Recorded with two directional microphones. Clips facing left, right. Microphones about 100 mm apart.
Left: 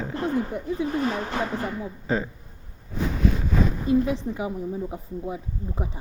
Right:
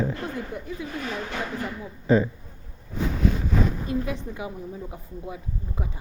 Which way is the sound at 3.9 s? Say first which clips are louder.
Left 6 dB; 30° left (ahead or behind).